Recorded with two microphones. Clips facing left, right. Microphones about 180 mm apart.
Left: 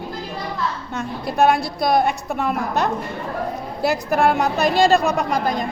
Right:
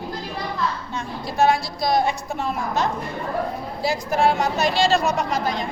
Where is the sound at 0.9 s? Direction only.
60° left (ahead or behind).